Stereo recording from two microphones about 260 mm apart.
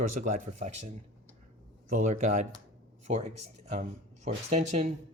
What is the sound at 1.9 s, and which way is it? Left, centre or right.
Speech, right.